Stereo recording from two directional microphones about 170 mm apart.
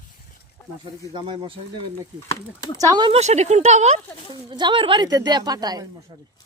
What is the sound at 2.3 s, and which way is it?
Speech, 20° left (ahead or behind).